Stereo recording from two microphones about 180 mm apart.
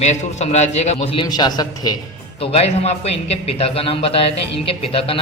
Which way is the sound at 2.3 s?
35° left (ahead or behind).